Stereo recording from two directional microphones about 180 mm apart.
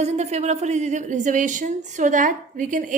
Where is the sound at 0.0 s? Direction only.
40° right (ahead or behind).